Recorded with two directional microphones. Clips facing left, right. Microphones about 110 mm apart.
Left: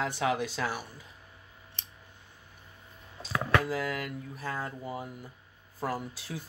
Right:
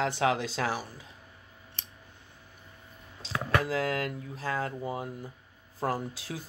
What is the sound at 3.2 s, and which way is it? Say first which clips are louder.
Speech: left 1 dB; 90° right.